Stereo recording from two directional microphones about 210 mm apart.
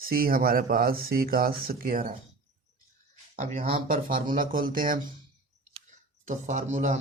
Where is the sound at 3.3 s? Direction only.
40° right (ahead or behind).